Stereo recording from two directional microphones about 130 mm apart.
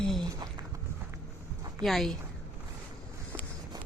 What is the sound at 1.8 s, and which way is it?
Speech, centre (ahead or behind).